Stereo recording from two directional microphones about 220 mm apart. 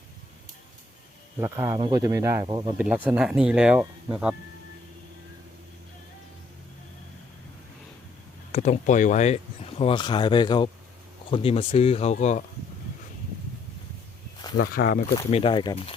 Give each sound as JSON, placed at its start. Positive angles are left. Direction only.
{"t": 1.4, "sound": "speech", "side_deg": -10}
{"t": 2.7, "sound": "speech", "side_deg": -5}
{"t": 8.5, "sound": "speech", "side_deg": 30}
{"t": 14.7, "sound": "speech", "side_deg": 40}
{"t": 15.3, "sound": "speech", "side_deg": 25}